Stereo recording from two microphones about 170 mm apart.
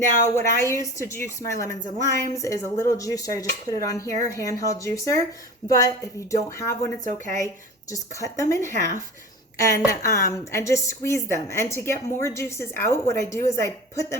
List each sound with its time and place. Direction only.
0.3 s a woman's voice: 15° left (ahead or behind)
8.6 s speech: 45° right (ahead or behind)
9.6 s a woman's voice: 20° left (ahead or behind)